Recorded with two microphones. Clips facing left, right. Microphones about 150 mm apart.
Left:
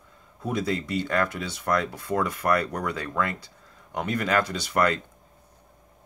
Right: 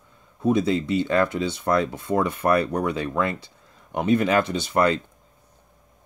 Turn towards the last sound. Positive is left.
turn(degrees=-25)  # may be behind; listen again after turning